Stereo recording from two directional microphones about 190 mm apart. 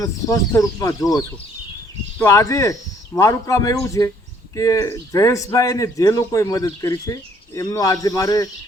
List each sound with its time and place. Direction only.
0.0 s a man's voice: 20° left (ahead or behind)